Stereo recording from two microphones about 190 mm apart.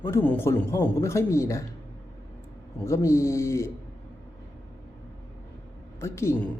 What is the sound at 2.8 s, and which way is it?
Speech, 15° left (ahead or behind).